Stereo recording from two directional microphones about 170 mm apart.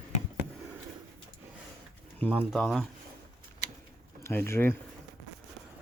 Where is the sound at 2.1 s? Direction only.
10° left (ahead or behind).